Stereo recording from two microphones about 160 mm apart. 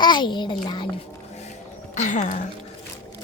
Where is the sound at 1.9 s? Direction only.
50° left (ahead or behind).